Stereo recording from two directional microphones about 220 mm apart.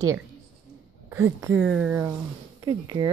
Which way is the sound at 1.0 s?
10° right (ahead or behind).